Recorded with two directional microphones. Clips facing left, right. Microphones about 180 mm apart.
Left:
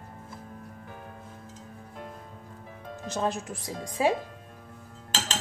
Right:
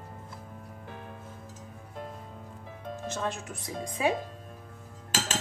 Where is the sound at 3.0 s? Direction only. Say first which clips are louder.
Left 5 dB; 35° left (ahead or behind).